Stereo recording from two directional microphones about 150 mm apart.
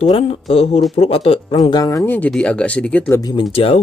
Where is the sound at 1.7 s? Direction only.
25° left (ahead or behind).